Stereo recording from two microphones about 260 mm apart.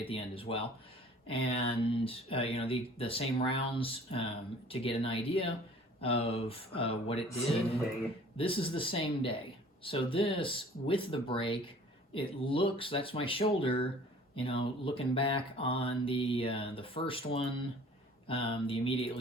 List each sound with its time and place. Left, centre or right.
0.0 s mantra: left